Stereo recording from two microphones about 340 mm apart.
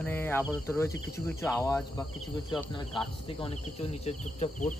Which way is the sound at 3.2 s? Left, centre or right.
Centre.